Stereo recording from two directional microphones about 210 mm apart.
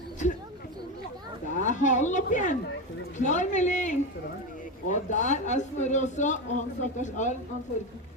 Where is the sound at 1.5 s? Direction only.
35° left (ahead or behind).